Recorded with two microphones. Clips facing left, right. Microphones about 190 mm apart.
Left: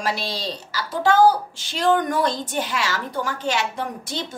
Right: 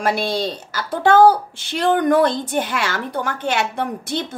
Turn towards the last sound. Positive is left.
turn(degrees=-60)  # may be behind; listen again after turning